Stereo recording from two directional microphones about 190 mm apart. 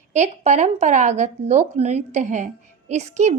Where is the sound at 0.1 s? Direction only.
40° right (ahead or behind).